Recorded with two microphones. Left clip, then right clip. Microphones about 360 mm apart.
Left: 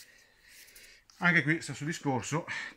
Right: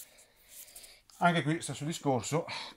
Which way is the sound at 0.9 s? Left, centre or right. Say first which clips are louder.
Left 2 dB; centre.